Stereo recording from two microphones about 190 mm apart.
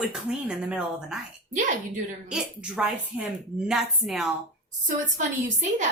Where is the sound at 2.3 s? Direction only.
5° right (ahead or behind).